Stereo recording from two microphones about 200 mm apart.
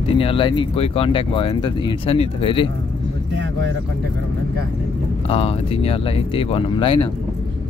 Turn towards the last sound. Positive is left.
turn(degrees=25)  # may be behind; listen again after turning